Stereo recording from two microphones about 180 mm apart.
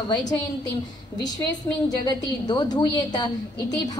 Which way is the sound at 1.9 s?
20° left (ahead or behind).